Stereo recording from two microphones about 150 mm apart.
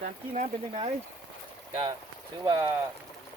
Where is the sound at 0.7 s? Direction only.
40° right (ahead or behind).